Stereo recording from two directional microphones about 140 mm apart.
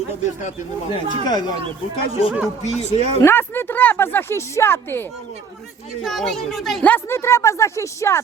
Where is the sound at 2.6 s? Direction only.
55° left (ahead or behind).